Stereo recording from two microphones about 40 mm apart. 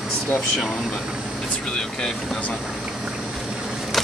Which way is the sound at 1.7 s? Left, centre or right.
Centre.